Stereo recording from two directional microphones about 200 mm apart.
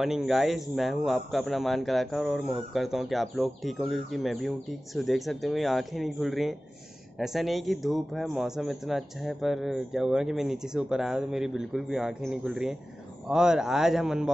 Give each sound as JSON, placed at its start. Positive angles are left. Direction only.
{"t": 0.0, "sound": "a man's voice", "side_deg": 0}